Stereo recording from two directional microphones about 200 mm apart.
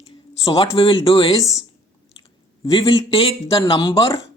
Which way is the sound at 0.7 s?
25° left (ahead or behind).